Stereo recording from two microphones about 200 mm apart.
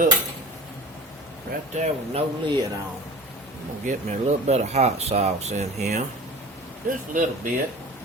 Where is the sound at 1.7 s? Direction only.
35° right (ahead or behind).